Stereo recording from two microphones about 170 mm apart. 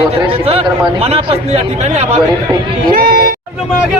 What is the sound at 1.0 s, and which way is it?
Speech, 35° right (ahead or behind).